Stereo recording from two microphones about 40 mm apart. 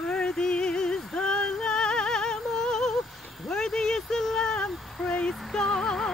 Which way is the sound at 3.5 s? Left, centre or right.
Centre.